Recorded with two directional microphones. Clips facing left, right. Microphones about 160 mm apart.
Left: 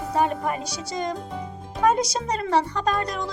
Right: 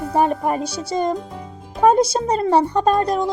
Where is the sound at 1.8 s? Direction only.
30° right (ahead or behind).